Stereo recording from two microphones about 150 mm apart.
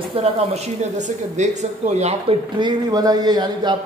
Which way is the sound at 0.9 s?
50° right (ahead or behind).